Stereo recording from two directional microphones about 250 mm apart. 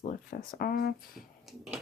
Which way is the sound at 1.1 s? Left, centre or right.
Centre.